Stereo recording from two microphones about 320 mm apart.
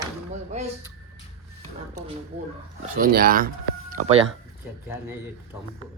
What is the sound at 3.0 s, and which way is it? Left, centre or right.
Speech, right.